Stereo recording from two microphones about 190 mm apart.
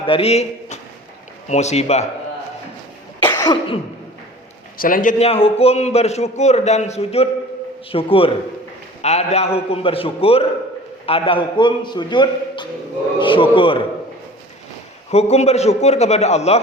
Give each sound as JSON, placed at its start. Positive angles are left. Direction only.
{"t": 0.0, "sound": "a man's voice", "side_deg": 30}
{"t": 3.2, "sound": "cough", "side_deg": 20}
{"t": 4.8, "sound": "a man's voice", "side_deg": 45}
{"t": 15.1, "sound": "a man's voice", "side_deg": 35}